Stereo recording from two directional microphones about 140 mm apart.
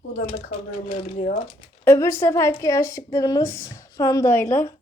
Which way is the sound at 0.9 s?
65° left (ahead or behind).